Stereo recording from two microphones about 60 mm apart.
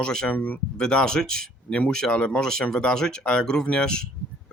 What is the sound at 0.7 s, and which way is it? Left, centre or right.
Speech, centre.